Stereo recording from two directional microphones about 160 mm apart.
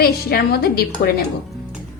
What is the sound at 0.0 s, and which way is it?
Speech, 75° left (ahead or behind).